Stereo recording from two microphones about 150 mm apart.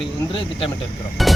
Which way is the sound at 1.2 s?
Centre (ahead or behind).